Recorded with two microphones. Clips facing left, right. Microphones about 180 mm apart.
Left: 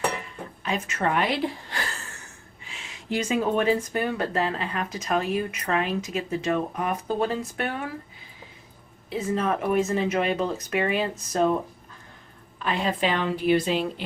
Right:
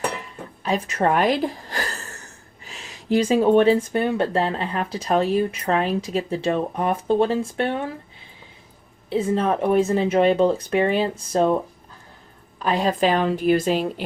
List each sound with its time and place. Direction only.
0.6 s a woman's voice: 35° right (ahead or behind)
9.0 s speech: 30° right (ahead or behind)
12.6 s a woman's voice: 40° right (ahead or behind)